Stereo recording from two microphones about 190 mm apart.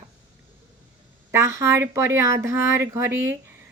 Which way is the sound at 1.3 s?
15° right (ahead or behind).